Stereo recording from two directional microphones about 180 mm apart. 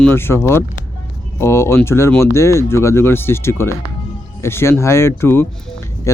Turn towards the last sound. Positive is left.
turn(degrees=15)  # may be behind; listen again after turning